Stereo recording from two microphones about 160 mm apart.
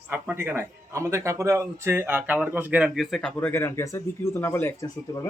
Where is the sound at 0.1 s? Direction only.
15° right (ahead or behind); by 3.5 s 5° left (ahead or behind).